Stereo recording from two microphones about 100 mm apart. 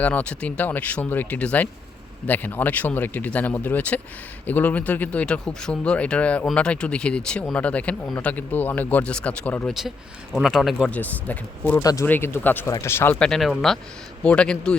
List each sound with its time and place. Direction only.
0.0 s speech: 15° left (ahead or behind)
9.6 s speech: 5° right (ahead or behind)
10.9 s speech: 15° left (ahead or behind)
11.8 s speech: 35° left (ahead or behind)
12.0 s speech: 20° left (ahead or behind)
12.6 s speech: 30° left (ahead or behind)
13.1 s speech: 5° left (ahead or behind)